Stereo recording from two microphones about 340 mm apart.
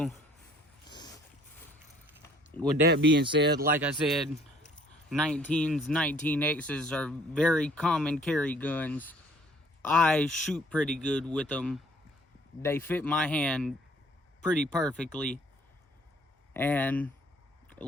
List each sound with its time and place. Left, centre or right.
0.9 s dog: centre
2.8 s speech: right
3.8 s speech: centre
16.6 s speech: centre